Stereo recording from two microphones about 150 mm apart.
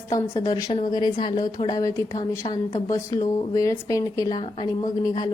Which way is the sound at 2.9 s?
20° left (ahead or behind).